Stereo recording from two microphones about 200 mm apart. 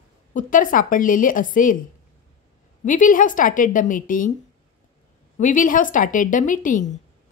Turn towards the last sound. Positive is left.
turn(degrees=40)  # may be behind; listen again after turning